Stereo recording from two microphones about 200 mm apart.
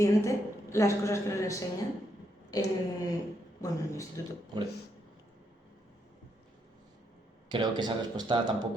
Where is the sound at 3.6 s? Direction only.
15° left (ahead or behind).